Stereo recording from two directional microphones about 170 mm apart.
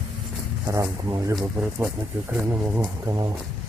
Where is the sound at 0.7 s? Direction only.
20° right (ahead or behind).